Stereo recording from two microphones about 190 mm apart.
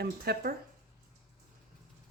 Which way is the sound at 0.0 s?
55° right (ahead or behind).